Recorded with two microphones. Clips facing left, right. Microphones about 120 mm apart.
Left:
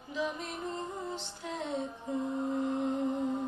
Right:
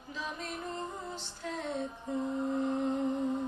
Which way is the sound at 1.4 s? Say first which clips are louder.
Right 1 dB; 15° left (ahead or behind).